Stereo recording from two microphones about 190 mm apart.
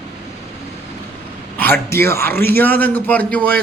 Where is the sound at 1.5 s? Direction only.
10° left (ahead or behind).